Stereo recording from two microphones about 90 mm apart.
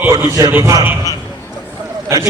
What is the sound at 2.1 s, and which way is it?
Speech, 30° right (ahead or behind).